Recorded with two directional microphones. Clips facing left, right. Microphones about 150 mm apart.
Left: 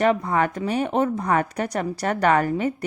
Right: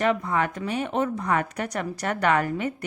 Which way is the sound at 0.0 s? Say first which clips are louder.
Left 3 dB; 40° left (ahead or behind).